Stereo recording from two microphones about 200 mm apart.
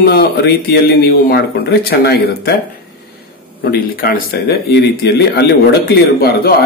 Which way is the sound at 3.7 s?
50° left (ahead or behind).